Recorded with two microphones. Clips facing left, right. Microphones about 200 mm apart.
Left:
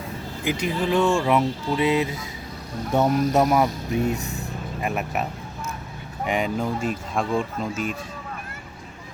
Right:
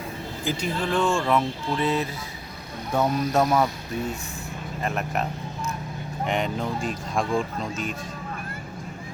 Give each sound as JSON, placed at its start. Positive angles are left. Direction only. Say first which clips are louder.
{"t": 0.4, "sound": "speech", "louder": "left 3 dB", "side_deg": 10}
{"t": 4.8, "sound": "speech", "louder": "left 1 dB", "side_deg": 10}